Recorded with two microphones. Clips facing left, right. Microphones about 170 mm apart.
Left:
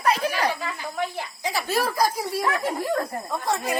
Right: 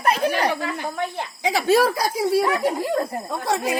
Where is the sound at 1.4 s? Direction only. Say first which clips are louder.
Right 8 dB; 80° right.